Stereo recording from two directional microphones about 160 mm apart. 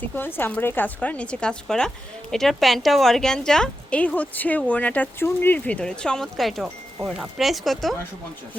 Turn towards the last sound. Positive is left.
turn(degrees=0)  # may be behind; listen again after turning